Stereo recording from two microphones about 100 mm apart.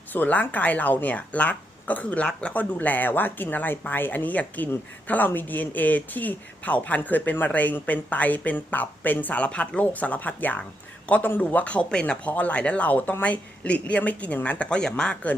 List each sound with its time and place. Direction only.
0.1 s speech: 15° left (ahead or behind)